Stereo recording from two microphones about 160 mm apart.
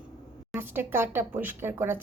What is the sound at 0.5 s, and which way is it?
Speech, 15° right (ahead or behind).